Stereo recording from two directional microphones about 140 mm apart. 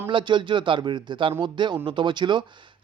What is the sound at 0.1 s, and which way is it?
Speech, 35° right (ahead or behind).